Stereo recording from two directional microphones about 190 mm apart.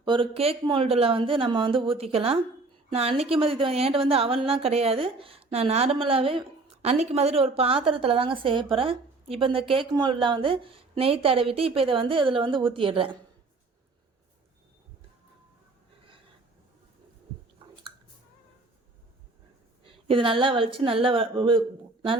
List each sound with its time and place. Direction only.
0.0 s a woman's voice: 25° right (ahead or behind)
19.8 s a woman's voice: 30° right (ahead or behind)